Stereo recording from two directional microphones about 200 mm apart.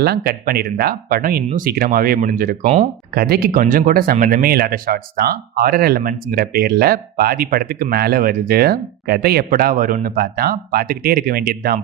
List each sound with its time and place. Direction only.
0.0 s speech: 50° right (ahead or behind)
3.2 s speech: 50° right (ahead or behind)